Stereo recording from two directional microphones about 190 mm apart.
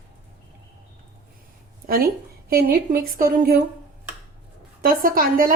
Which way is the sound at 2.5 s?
50° right (ahead or behind).